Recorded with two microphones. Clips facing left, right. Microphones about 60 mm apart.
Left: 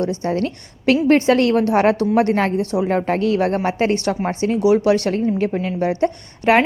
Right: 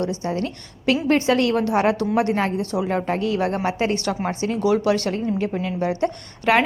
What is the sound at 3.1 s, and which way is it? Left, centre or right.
Speech, left.